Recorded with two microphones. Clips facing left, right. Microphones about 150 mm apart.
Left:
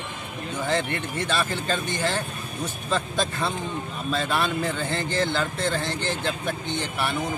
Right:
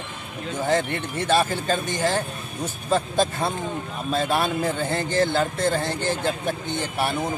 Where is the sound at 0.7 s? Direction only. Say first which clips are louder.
Right 3 dB; 45° right (ahead or behind).